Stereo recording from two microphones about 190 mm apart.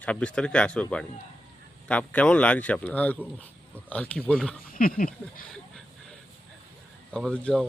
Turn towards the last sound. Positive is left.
turn(degrees=5)  # may be behind; listen again after turning